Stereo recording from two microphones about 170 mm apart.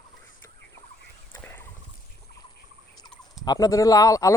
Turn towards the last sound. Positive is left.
turn(degrees=20)  # may be behind; listen again after turning